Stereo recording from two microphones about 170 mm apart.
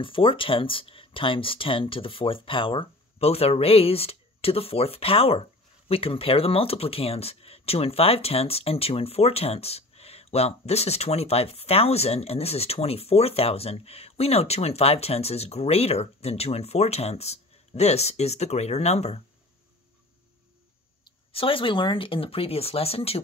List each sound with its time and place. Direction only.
0.0 s speech: 30° left (ahead or behind)
21.0 s speech: 30° left (ahead or behind)